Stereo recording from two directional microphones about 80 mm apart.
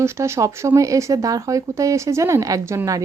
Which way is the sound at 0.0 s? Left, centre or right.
Right.